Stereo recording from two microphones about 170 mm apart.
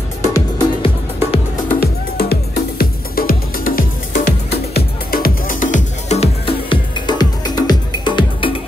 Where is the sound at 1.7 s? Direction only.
65° left (ahead or behind).